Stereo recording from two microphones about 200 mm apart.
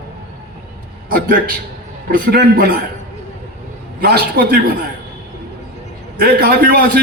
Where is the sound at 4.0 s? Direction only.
50° right (ahead or behind).